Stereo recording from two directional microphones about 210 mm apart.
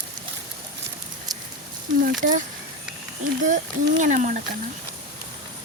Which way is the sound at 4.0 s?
35° right (ahead or behind).